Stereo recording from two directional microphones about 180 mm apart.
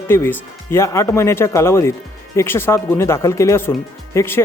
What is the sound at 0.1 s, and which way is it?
A man's voice, 15° left (ahead or behind).